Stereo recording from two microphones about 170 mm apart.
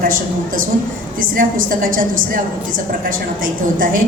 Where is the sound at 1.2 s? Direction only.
55° right (ahead or behind).